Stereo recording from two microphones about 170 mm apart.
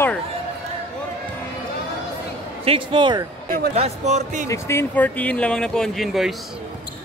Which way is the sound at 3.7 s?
40° right (ahead or behind).